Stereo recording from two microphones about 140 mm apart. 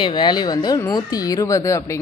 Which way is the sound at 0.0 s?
30° left (ahead or behind).